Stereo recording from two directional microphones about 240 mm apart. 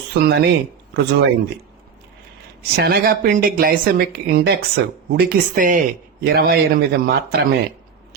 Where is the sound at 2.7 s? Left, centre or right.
Right.